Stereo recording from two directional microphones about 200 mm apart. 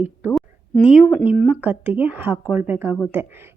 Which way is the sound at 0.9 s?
Centre (ahead or behind).